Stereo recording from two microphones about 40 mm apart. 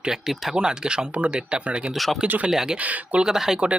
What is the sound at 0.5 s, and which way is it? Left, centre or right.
Speech, right.